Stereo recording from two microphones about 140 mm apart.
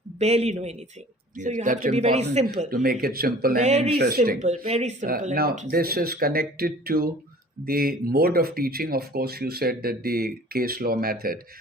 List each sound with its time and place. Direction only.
0.2 s a man's voice: 50° right (ahead or behind)
1.4 s a man's voice: 65° right (ahead or behind)
2.6 s speech: 80° right
3.6 s a man's voice: 55° right (ahead or behind)
3.9 s speech: 90° right
4.4 s a man's voice: 50° right (ahead or behind)
5.0 s speech: 90° right